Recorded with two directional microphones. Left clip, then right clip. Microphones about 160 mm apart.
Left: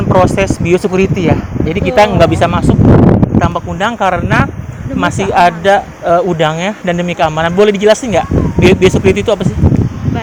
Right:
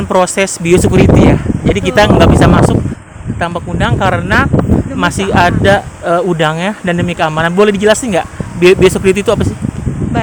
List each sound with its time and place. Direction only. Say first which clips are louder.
0.1 s speech: left 1 dB; 50° right (ahead or behind)
3.3 s speech: left 3 dB; 25° right (ahead or behind)
4.0 s speech: right 1 dB; 45° right (ahead or behind)